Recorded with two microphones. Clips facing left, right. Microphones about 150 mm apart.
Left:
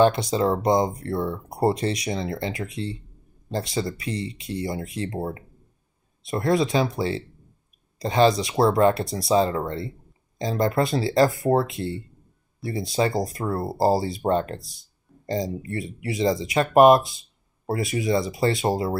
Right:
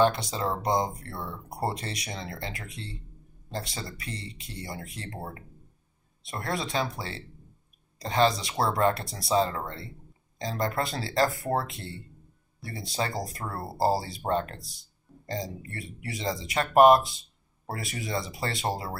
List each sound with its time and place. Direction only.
0.0 s speech: 15° left (ahead or behind)